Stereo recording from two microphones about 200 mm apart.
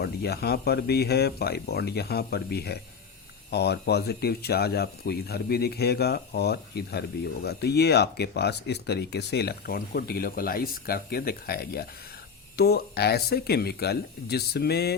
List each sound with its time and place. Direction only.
0.0 s speech: 55° left (ahead or behind)